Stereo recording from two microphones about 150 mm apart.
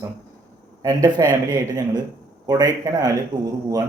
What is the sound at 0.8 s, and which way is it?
A man's voice, 25° right (ahead or behind).